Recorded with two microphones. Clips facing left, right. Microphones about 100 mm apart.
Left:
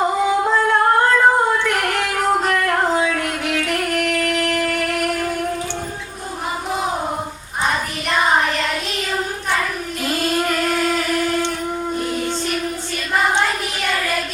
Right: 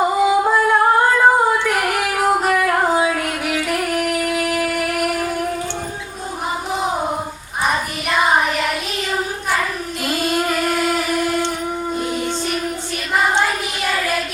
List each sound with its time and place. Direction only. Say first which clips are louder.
0.0 s singing: right 2 dB; 10° right (ahead or behind)
8.4 s child singing: right 1 dB; 10° right (ahead or behind)
10.0 s singing: even; 5° right (ahead or behind)
11.9 s a sound: even; 10° right (ahead or behind)
13.4 s child singing: right 1 dB; 5° right (ahead or behind)